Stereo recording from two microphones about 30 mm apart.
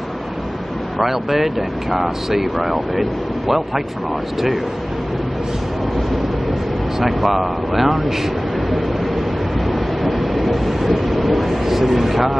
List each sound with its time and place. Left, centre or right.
0.9 s speech: centre
7.0 s speech: centre
9.7 s train: centre